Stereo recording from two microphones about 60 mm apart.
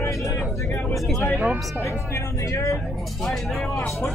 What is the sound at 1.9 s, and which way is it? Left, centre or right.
Speech, left.